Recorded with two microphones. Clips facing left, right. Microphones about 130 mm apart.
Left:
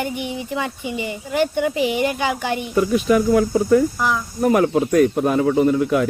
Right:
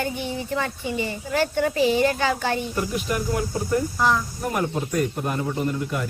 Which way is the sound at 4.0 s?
10° left (ahead or behind).